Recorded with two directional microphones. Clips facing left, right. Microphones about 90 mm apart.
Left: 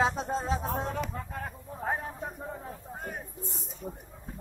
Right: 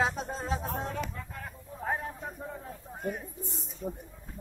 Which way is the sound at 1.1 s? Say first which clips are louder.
Left 5 dB; 30° left (ahead or behind).